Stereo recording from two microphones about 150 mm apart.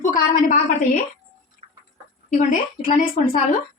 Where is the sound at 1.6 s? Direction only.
45° right (ahead or behind).